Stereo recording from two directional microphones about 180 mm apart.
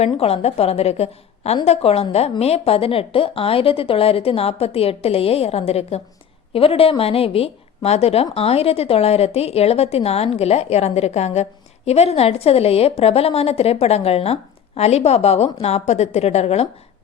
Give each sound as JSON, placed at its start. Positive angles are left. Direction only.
{"t": 0.0, "sound": "a woman's voice", "side_deg": 35}